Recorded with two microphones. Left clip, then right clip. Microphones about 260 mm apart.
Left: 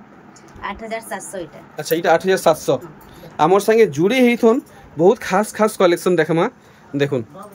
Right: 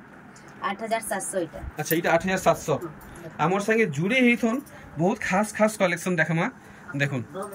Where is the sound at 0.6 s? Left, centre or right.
Centre.